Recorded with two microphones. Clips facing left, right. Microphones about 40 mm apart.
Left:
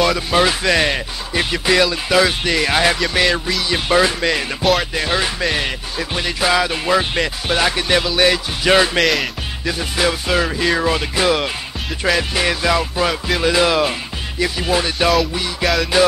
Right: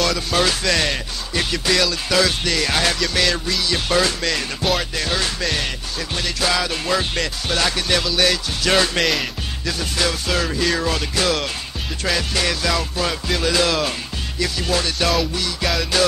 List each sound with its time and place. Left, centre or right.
0.0 s music: centre
9.0 s music: centre
9.7 s music: centre
15.6 s music: centre